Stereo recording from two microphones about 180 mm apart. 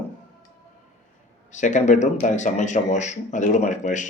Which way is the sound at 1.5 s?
45° left (ahead or behind).